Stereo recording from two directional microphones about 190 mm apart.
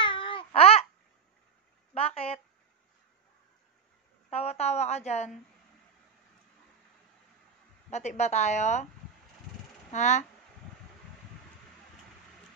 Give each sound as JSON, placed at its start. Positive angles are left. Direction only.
{"t": 0.0, "sound": "babbling", "side_deg": 25}
{"t": 2.0, "sound": "a sound", "side_deg": 30}
{"t": 4.3, "sound": "a woman's voice", "side_deg": 35}
{"t": 7.9, "sound": "speech", "side_deg": 35}
{"t": 9.9, "sound": "speech", "side_deg": 40}